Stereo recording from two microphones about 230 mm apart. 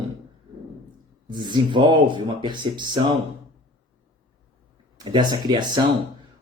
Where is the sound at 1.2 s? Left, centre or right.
Centre.